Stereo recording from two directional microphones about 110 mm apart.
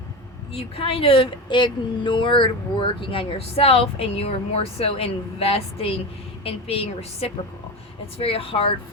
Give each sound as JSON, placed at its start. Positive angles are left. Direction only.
{"t": 0.5, "sound": "a woman's voice", "side_deg": 60}